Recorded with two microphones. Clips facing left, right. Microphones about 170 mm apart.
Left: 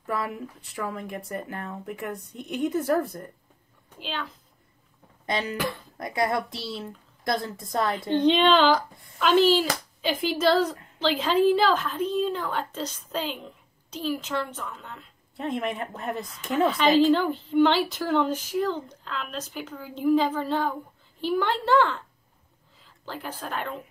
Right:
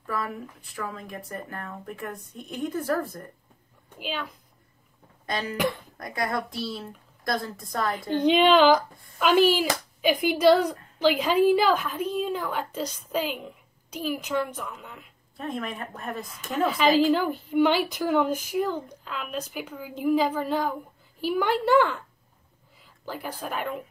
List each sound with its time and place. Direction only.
0.0 s a sound: 25° left (ahead or behind)
0.7 s speech: 20° left (ahead or behind)
4.0 s a woman's voice: 10° right (ahead or behind)
5.2 s speech: 25° left (ahead or behind)
5.6 s a woman's voice: 20° right (ahead or behind)
5.9 s speech: 25° left (ahead or behind)
8.3 s a woman's voice: 10° right (ahead or behind)
15.3 s speech: 20° left (ahead or behind)
16.6 s a woman's voice: 5° right (ahead or behind)